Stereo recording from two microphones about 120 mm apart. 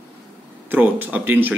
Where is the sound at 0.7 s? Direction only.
15° right (ahead or behind).